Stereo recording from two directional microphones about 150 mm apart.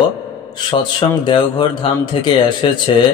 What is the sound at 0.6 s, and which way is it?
Speech, 30° left (ahead or behind).